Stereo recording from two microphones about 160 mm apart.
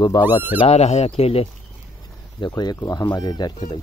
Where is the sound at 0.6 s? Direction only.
40° left (ahead or behind).